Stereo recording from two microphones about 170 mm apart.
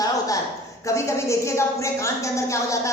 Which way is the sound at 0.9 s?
15° left (ahead or behind).